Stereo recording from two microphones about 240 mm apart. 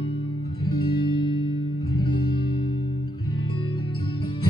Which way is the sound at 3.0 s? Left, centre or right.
Centre.